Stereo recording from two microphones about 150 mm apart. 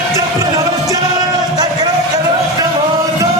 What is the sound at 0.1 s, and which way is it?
Music, 20° right (ahead or behind).